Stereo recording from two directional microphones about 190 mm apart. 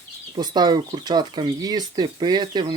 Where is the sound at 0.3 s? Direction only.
20° right (ahead or behind).